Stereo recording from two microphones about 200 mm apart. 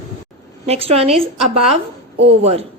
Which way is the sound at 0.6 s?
30° right (ahead or behind).